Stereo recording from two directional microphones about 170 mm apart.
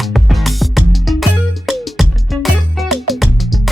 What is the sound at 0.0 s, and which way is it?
Music, centre (ahead or behind).